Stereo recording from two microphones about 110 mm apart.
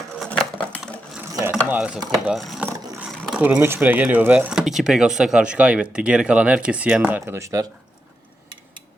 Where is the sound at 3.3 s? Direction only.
15° right (ahead or behind).